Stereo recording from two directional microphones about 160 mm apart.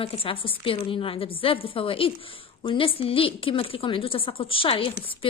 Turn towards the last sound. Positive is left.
turn(degrees=35)  # may be behind; listen again after turning